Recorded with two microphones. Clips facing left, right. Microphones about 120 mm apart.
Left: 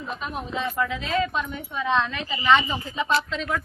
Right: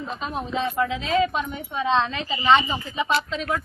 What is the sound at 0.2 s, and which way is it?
A woman's voice, 25° right (ahead or behind).